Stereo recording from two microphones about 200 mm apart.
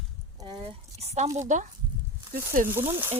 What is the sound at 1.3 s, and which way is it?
Speech, 40° right (ahead or behind).